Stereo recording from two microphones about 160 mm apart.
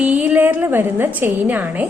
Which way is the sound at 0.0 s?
10° right (ahead or behind).